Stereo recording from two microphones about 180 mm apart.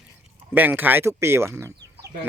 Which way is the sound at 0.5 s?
10° right (ahead or behind).